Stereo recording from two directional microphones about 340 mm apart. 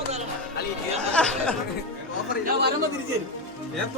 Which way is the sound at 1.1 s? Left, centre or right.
Centre.